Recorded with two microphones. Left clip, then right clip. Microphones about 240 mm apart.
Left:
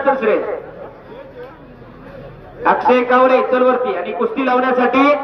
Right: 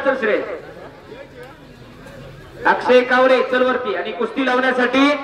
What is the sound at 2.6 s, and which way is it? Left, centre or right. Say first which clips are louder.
A man's voice: left 1 dB; centre.